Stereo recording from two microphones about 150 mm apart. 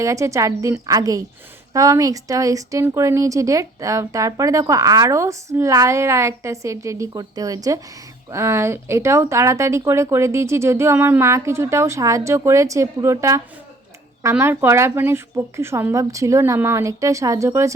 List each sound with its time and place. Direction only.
0.0 s speech: 20° right (ahead or behind)